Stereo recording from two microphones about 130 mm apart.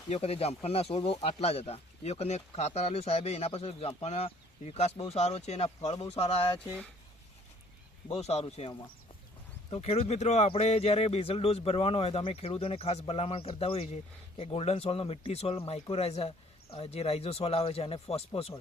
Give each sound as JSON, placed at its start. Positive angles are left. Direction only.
{"t": 0.1, "sound": "speech", "side_deg": 50}
{"t": 8.1, "sound": "speech", "side_deg": 55}